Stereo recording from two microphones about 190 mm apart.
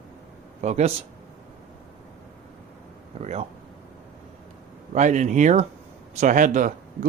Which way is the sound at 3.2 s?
35° right (ahead or behind).